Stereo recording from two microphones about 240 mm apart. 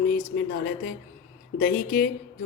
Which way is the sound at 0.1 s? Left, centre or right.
Left.